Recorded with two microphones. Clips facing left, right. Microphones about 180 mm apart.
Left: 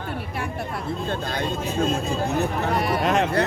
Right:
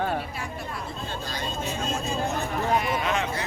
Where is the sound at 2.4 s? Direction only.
65° left (ahead or behind).